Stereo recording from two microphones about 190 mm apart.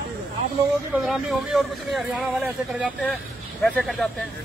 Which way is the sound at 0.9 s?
Centre (ahead or behind).